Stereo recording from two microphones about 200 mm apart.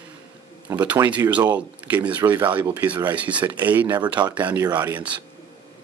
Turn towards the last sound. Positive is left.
turn(degrees=-10)  # may be behind; listen again after turning